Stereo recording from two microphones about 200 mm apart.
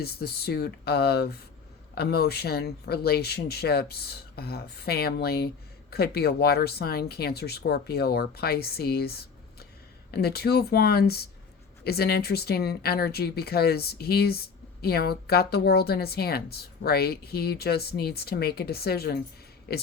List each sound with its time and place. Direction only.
0.0 s speech: 50° left (ahead or behind)